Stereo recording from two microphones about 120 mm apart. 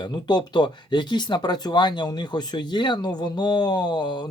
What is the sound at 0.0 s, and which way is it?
Speech, 35° left (ahead or behind).